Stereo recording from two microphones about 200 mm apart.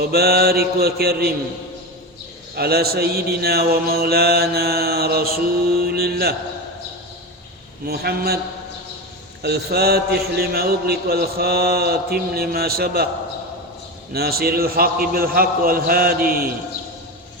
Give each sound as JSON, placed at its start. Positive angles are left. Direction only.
{"t": 0.0, "sound": "mantra", "side_deg": -50}
{"t": 2.6, "sound": "mantra", "side_deg": -50}
{"t": 7.9, "sound": "mantra", "side_deg": -50}
{"t": 9.4, "sound": "mantra", "side_deg": -55}
{"t": 14.1, "sound": "mantra", "side_deg": -50}